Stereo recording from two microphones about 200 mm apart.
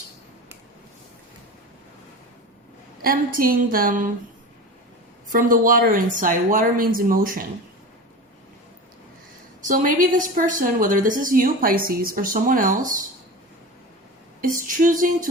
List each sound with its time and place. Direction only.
3.0 s a woman's voice: 45° right (ahead or behind)
5.3 s a woman's voice: 45° right (ahead or behind)
9.6 s a woman's voice: 40° right (ahead or behind)
14.4 s a woman's voice: 40° right (ahead or behind)